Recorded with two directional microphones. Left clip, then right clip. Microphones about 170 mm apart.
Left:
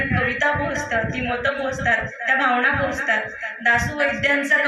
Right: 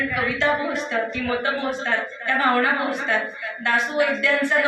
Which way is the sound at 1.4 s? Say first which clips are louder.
Left 2 dB; 40° left (ahead or behind).